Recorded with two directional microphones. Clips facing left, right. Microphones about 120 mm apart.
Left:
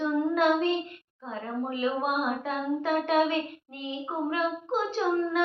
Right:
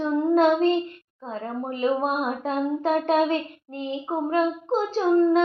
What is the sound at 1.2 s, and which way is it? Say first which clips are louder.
Speech: right 2 dB; 35° right (ahead or behind).